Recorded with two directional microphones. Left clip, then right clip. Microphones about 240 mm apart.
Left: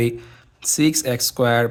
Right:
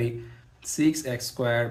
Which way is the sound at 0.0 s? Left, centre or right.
Left.